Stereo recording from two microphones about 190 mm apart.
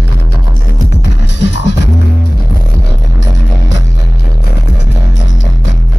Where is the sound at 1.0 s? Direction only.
70° left (ahead or behind).